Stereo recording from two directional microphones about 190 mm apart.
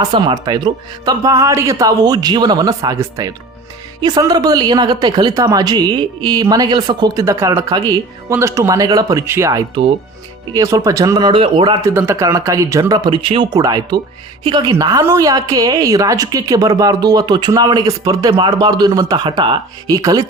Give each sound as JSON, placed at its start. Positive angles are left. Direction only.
{"t": 0.0, "sound": "a woman's voice", "side_deg": -25}